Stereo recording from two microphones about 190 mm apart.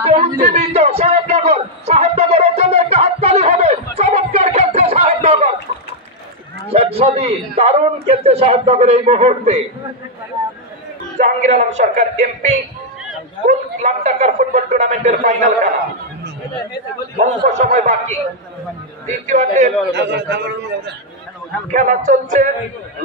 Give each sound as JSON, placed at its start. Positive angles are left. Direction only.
{"t": 0.0, "sound": "a sound", "side_deg": -30}
{"t": 6.7, "sound": "a man's voice", "side_deg": -30}
{"t": 11.1, "sound": "a man's voice", "side_deg": -40}
{"t": 17.5, "sound": "a man's voice", "side_deg": -40}
{"t": 19.9, "sound": "a man's voice", "side_deg": -60}
{"t": 21.7, "sound": "a man's voice", "side_deg": -40}